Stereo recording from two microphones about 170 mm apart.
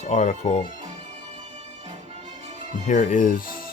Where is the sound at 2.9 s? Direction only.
50° left (ahead or behind).